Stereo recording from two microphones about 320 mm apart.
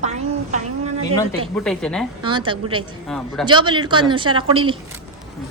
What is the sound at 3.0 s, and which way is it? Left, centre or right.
Speech, centre.